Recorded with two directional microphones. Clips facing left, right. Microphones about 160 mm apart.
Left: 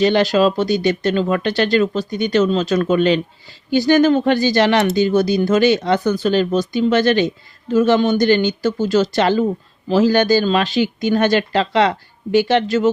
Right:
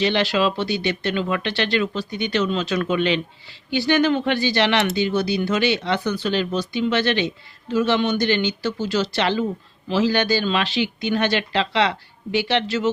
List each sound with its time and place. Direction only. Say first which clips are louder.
0.0 s speech: left 6 dB; 45° left (ahead or behind)